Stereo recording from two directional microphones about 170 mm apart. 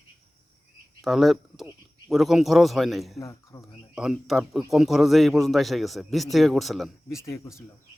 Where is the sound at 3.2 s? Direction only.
20° left (ahead or behind).